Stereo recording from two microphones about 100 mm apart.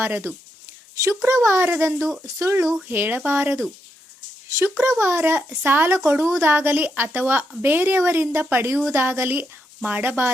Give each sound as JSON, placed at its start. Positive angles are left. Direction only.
{"t": 0.0, "sound": "a woman's voice", "side_deg": -20}
{"t": 2.0, "sound": "speech", "side_deg": 0}
{"t": 2.2, "sound": "a woman's voice", "side_deg": -30}
{"t": 2.8, "sound": "a woman's voice", "side_deg": -20}
{"t": 4.8, "sound": "a woman's voice", "side_deg": -25}